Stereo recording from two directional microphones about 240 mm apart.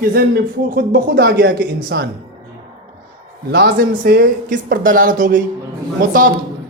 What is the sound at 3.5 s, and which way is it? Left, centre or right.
Speech, right.